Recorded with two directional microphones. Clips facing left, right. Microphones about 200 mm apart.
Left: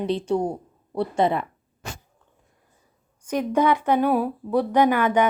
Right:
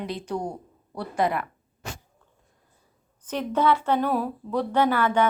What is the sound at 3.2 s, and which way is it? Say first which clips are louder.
A woman's voice: left 3 dB; 10° left (ahead or behind).